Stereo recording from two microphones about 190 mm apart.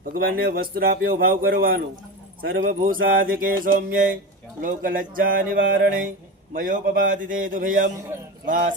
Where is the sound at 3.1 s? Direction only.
50° right (ahead or behind).